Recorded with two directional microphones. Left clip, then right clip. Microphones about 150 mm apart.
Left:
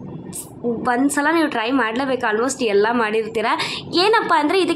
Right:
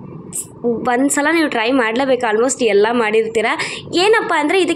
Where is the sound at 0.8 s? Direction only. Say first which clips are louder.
Right 2 dB; 15° right (ahead or behind).